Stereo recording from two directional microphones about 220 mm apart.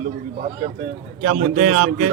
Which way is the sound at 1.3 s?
35° right (ahead or behind).